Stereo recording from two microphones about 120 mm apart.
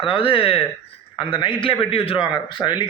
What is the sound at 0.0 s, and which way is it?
A man's voice, 45° left (ahead or behind).